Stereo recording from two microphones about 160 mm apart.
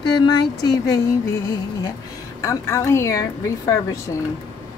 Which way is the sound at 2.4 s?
20° left (ahead or behind).